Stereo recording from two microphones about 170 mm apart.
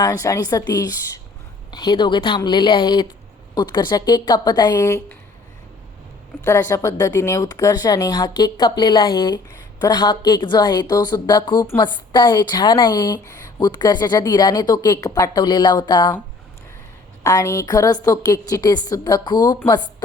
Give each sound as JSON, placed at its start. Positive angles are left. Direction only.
{"t": 0.0, "sound": "a woman's voice", "side_deg": 20}
{"t": 6.4, "sound": "a woman's voice", "side_deg": 15}
{"t": 17.2, "sound": "a woman's voice", "side_deg": 20}